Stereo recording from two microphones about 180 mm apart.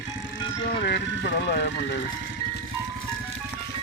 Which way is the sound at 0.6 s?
65° left (ahead or behind).